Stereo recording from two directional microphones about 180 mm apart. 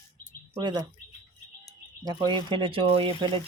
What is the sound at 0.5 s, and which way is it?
Speech, 25° right (ahead or behind).